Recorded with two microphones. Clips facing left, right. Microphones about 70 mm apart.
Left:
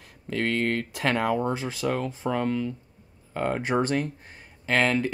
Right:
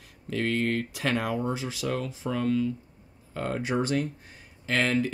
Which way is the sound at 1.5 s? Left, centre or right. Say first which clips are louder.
Left 3 dB; left.